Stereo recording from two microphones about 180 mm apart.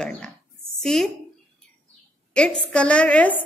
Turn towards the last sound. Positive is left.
turn(degrees=5)  # may be behind; listen again after turning